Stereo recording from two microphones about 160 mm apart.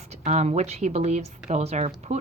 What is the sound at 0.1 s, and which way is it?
A woman's voice, 45° right (ahead or behind).